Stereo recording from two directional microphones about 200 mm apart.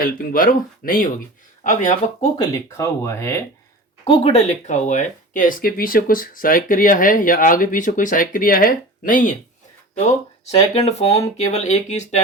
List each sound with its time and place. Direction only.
0.0 s speech: 45° left (ahead or behind)
2.4 s speech: 15° left (ahead or behind)
4.0 s speech: 30° left (ahead or behind)
10.5 s speech: 30° left (ahead or behind)